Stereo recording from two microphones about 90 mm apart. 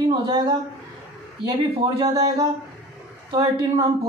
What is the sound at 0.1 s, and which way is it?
Speech, 50° right (ahead or behind).